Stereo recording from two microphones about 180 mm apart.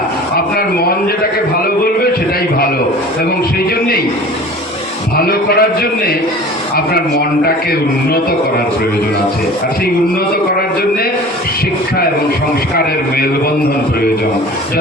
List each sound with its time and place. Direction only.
0.5 s speech: 55° left (ahead or behind)
5.1 s a man's voice: 60° left (ahead or behind)